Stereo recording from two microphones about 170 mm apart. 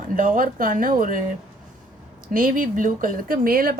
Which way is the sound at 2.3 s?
55° right (ahead or behind).